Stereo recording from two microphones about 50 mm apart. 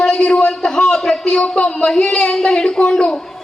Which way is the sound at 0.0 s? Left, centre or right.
Centre.